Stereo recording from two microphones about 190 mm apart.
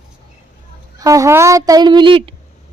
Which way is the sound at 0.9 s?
15° right (ahead or behind).